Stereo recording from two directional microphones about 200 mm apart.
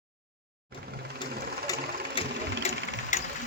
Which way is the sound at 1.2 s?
20° left (ahead or behind).